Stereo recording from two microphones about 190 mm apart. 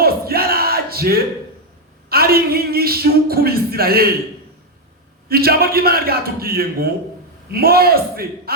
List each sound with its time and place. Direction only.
0.0 s battle cry: 55° right (ahead or behind)
2.0 s a man's voice: 55° right (ahead or behind)
5.3 s a man's voice: 55° right (ahead or behind)